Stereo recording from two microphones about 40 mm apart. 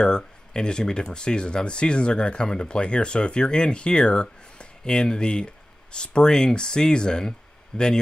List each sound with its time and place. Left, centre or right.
0.0 s speech: left